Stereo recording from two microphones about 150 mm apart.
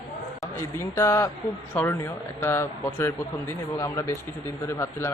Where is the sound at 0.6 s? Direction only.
15° left (ahead or behind).